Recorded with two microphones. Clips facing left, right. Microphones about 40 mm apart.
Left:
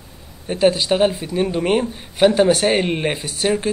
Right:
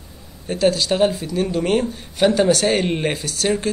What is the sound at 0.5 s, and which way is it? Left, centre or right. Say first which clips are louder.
Speech: left 2 dB; left.